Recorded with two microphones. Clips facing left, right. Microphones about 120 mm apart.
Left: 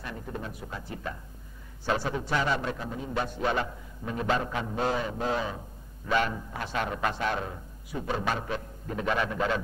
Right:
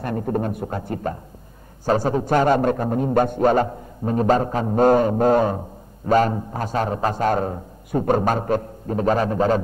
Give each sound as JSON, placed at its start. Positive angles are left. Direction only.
{"t": 0.0, "sound": "a man's voice", "side_deg": -50}